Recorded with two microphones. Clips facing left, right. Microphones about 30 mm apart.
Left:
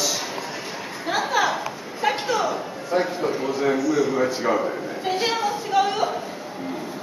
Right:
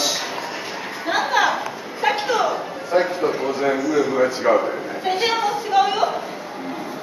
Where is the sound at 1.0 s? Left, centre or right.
Centre.